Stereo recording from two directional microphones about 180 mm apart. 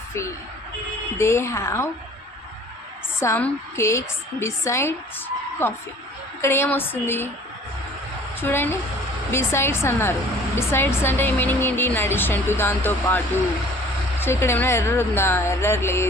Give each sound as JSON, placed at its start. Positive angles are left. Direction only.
{"t": 0.1, "sound": "speech", "side_deg": 15}
{"t": 3.2, "sound": "speech", "side_deg": 10}
{"t": 8.4, "sound": "speech", "side_deg": 10}